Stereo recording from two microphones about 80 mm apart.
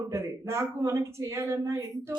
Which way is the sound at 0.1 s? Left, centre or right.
Right.